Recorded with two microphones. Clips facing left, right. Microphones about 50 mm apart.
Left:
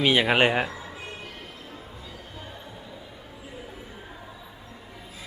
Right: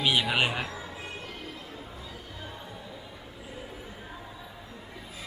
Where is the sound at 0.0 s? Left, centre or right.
Left.